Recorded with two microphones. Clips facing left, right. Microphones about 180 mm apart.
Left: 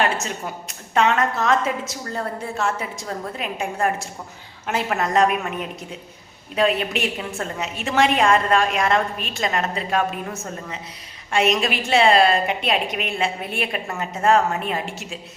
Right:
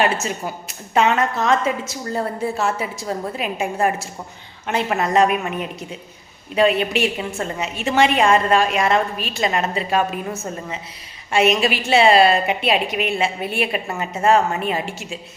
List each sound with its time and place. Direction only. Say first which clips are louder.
0.0 s a woman's voice: right 2 dB; 5° right (ahead or behind)
11.3 s a woman's voice: right 3 dB; 5° right (ahead or behind)